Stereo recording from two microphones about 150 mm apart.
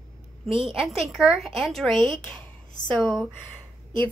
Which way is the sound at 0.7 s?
Centre (ahead or behind).